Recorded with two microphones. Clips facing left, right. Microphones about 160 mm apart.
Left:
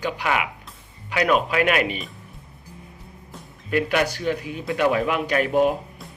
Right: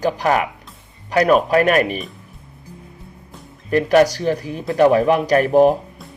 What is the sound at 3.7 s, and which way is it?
Speech, 40° right (ahead or behind).